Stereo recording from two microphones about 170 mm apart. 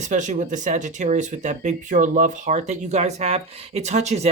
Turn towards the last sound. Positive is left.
turn(degrees=-40)  # may be behind; listen again after turning